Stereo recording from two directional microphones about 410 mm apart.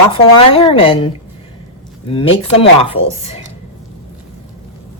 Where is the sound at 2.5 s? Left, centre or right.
Centre.